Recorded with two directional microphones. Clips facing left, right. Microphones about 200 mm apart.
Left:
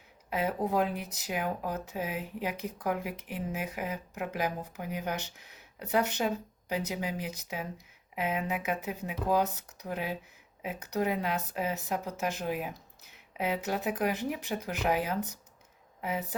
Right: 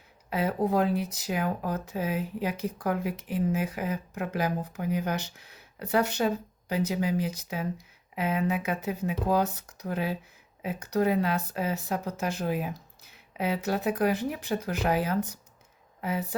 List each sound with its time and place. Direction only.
0.3 s speech: 15° left (ahead or behind)